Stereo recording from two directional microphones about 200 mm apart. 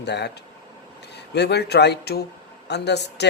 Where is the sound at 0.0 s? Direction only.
55° left (ahead or behind).